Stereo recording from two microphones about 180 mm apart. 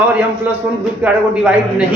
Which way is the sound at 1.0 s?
5° right (ahead or behind).